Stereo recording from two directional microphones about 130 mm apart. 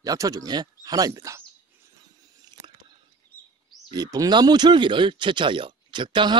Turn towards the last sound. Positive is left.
turn(degrees=-40)  # may be behind; listen again after turning